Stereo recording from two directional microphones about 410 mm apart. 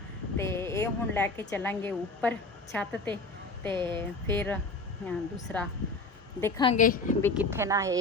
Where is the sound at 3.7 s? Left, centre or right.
Centre.